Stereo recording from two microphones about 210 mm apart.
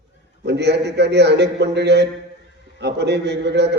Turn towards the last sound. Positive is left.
turn(degrees=-55)  # may be behind; listen again after turning